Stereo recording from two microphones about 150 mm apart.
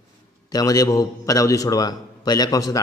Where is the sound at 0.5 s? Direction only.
25° left (ahead or behind).